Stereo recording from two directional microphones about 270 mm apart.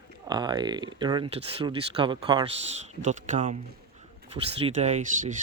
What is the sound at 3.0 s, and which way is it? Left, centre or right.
Speech, right.